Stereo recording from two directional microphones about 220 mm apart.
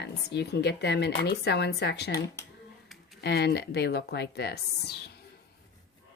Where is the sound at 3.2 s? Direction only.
50° left (ahead or behind).